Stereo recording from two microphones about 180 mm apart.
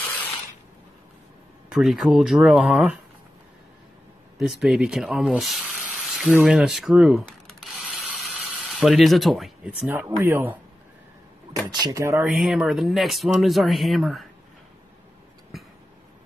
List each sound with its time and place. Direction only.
1.7 s speech: centre (ahead or behind)
4.4 s water: centre (ahead or behind)
9.8 s speech: 10° right (ahead or behind)
11.8 s speech: 15° right (ahead or behind)
12.4 s speech: 5° right (ahead or behind)
15.5 s a sound: centre (ahead or behind)